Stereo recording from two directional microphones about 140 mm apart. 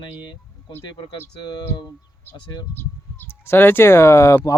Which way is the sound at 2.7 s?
15° left (ahead or behind).